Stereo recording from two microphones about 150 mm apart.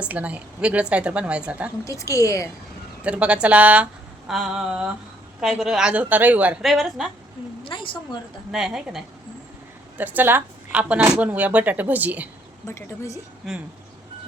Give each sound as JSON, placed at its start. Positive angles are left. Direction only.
{"t": 0.0, "sound": "speech", "side_deg": -10}
{"t": 1.8, "sound": "a woman's voice", "side_deg": 20}
{"t": 3.0, "sound": "a woman's voice", "side_deg": -10}
{"t": 7.6, "sound": "a sound", "side_deg": 35}
{"t": 8.5, "sound": "a woman's voice", "side_deg": -5}
{"t": 12.6, "sound": "speech", "side_deg": 20}